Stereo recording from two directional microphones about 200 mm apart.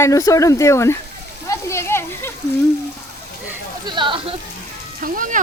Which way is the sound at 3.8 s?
25° right (ahead or behind).